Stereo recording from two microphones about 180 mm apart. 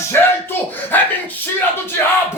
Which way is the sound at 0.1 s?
10° left (ahead or behind).